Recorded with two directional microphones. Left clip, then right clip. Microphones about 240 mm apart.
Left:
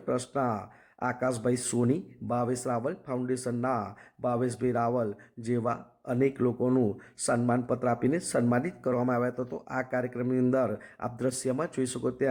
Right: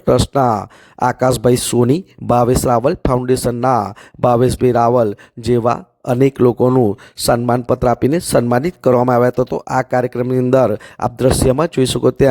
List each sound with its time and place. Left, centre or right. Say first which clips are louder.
0.0 s speech: right 16 dB; right